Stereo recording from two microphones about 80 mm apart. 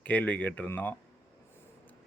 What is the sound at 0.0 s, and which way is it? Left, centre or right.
Speech, centre.